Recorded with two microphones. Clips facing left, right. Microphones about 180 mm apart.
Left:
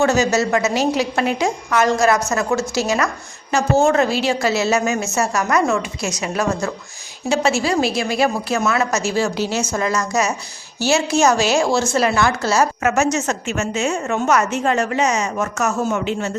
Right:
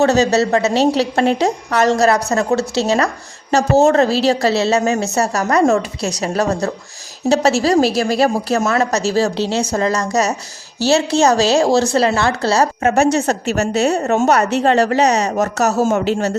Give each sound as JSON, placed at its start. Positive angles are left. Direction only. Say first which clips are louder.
{"t": 0.0, "sound": "speech", "louder": "right 3 dB", "side_deg": -35}